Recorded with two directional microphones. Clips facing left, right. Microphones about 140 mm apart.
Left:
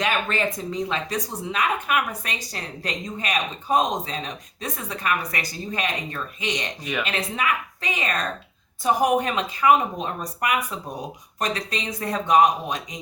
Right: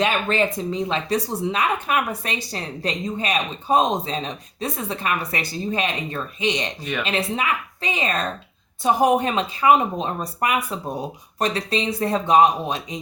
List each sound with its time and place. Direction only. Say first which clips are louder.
0.0 s speech: right 3 dB; 25° right (ahead or behind)